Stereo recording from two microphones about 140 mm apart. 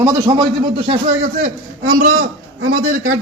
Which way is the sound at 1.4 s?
70° right (ahead or behind).